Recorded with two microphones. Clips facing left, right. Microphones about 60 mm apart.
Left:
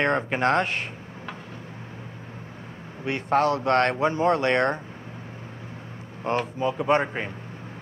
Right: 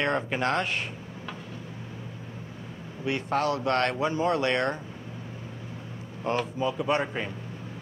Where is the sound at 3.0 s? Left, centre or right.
Left.